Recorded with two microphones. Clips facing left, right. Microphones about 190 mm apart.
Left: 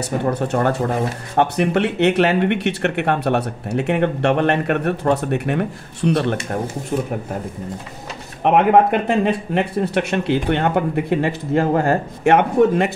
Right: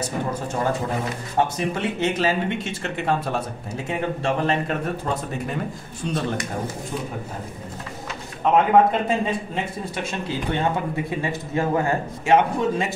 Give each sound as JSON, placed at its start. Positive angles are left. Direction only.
{"t": 0.3, "sound": "speech", "side_deg": 65}
{"t": 8.5, "sound": "speech", "side_deg": 65}